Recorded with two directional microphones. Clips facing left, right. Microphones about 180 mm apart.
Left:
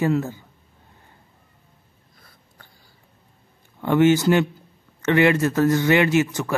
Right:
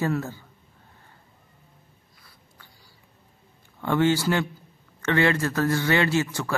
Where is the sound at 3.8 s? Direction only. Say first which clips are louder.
Left 5 dB; 15° left (ahead or behind).